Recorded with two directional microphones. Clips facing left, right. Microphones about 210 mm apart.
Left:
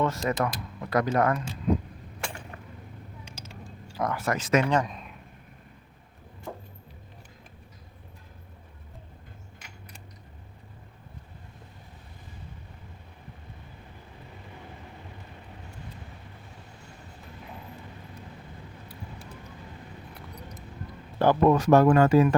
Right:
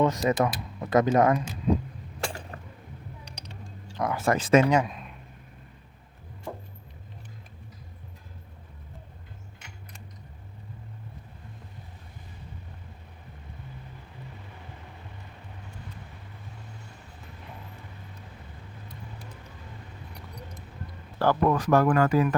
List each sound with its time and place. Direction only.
0.0 s speech: 20° right (ahead or behind)
2.2 s a sound: 35° right (ahead or behind)
3.2 s mechanisms: centre (ahead or behind)
4.1 s speech: 30° right (ahead or behind)
4.7 s speech: 5° right (ahead or behind)
21.2 s speech: 20° left (ahead or behind)